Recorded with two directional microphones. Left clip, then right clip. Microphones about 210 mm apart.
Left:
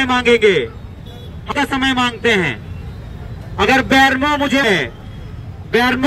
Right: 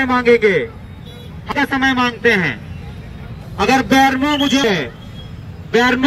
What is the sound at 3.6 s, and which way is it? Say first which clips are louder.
A man's voice: left 1 dB; 40° left (ahead or behind).